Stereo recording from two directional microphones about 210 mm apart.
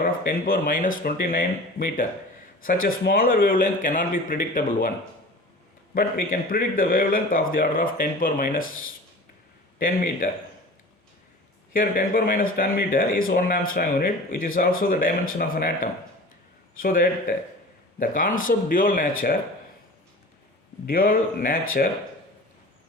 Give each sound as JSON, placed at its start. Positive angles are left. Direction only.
{"t": 0.0, "sound": "a man's voice", "side_deg": 45}
{"t": 5.9, "sound": "a man's voice", "side_deg": 45}
{"t": 9.7, "sound": "a man's voice", "side_deg": 40}
{"t": 11.7, "sound": "a man's voice", "side_deg": 40}
{"t": 20.8, "sound": "speech", "side_deg": 45}